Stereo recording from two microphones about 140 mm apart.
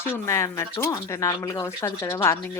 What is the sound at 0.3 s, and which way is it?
A woman's voice, 20° left (ahead or behind).